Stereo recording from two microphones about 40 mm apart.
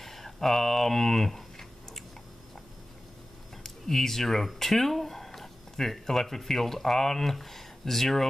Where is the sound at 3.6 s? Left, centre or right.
Centre.